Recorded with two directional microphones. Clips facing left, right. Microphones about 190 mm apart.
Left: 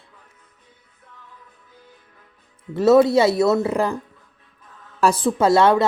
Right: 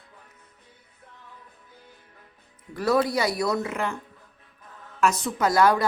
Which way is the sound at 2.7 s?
25° left (ahead or behind).